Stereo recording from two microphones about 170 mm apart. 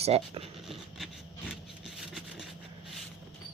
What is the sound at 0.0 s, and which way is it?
Speech, 35° right (ahead or behind).